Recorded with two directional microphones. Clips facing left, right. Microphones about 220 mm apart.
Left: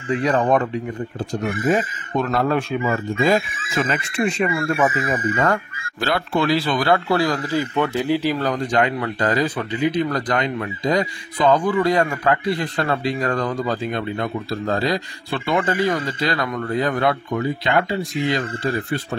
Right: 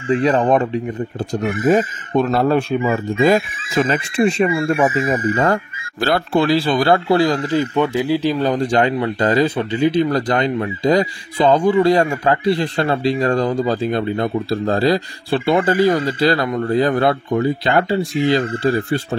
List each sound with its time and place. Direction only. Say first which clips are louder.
0.2 s speech: right 1 dB; 20° right (ahead or behind)
1.3 s speech: right 5 dB; 40° right (ahead or behind); by 8.3 s 10° right (ahead or behind)
8.4 s speech: right 4 dB; 30° right (ahead or behind)